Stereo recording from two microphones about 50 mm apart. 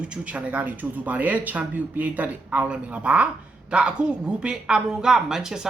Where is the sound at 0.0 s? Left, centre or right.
Right.